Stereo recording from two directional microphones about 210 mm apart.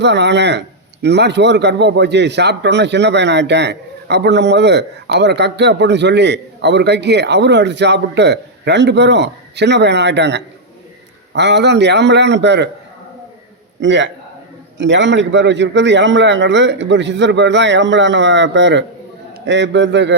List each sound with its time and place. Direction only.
0.0 s a man's voice: 55° right (ahead or behind)
13.8 s a man's voice: 60° right (ahead or behind)